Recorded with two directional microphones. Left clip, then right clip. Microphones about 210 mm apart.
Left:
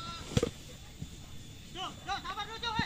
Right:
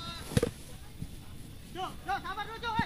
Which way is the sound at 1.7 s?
40° left (ahead or behind).